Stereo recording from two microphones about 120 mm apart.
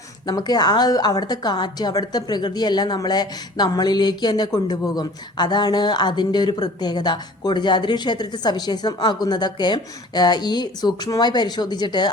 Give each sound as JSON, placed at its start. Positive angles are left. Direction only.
{"t": 0.3, "sound": "a woman's voice", "side_deg": 35}